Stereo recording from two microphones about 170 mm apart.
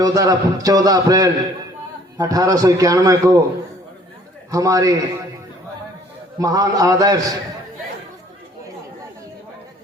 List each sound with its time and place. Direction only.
0.0 s a man's voice: 20° right (ahead or behind)
4.5 s a man's voice: 20° right (ahead or behind)
6.4 s a man's voice: 20° right (ahead or behind)